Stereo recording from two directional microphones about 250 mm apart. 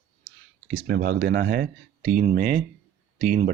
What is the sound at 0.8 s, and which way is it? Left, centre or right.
Speech, right.